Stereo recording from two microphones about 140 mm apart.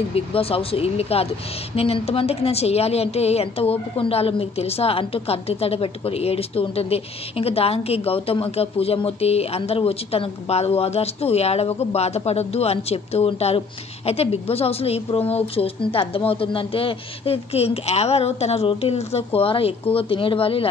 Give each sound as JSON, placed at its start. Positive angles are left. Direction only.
{"t": 0.1, "sound": "a woman's voice", "side_deg": 45}